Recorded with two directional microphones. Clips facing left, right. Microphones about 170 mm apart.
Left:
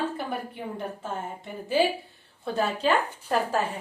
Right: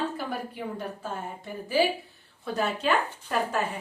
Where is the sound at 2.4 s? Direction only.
30° left (ahead or behind).